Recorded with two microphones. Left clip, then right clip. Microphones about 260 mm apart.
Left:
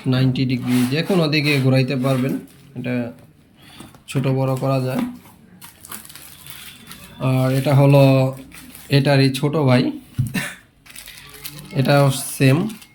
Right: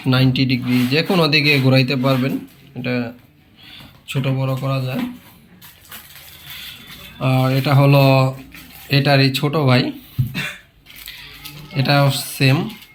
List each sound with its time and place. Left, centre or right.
0.1 s speech: centre
7.2 s speech: centre
11.7 s speech: centre